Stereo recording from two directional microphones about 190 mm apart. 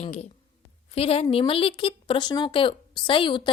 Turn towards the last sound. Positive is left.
turn(degrees=25)  # may be behind; listen again after turning